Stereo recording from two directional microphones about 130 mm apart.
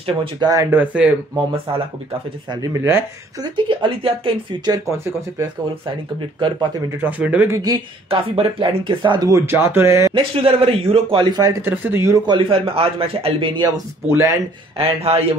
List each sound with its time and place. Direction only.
0.0 s speech: 40° right (ahead or behind)
0.5 s speech: 25° right (ahead or behind)
1.7 s a man's voice: 45° right (ahead or behind)
2.5 s speech: 20° right (ahead or behind)
3.4 s speech: 40° right (ahead or behind)
6.4 s speech: 35° right (ahead or behind)
7.0 s speech: 10° right (ahead or behind)
7.7 s speech: 40° right (ahead or behind)
9.3 s speech: 20° right (ahead or behind)
10.1 s speech: 45° right (ahead or behind)
11.6 s speech: 15° right (ahead or behind)
12.3 s a man's voice: 40° right (ahead or behind)
14.0 s speech: 20° right (ahead or behind)
14.8 s a man's voice: 50° right (ahead or behind)